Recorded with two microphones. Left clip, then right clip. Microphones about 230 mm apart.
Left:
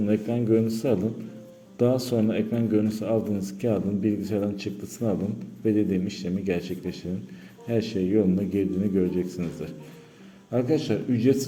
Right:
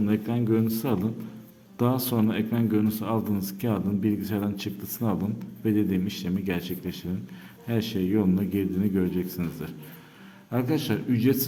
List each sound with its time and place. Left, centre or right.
0.0 s a man's voice: centre